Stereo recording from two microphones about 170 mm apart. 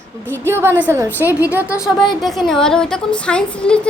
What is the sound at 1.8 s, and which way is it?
Speech, 25° left (ahead or behind).